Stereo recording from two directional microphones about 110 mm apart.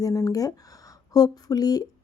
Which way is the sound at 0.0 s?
30° left (ahead or behind).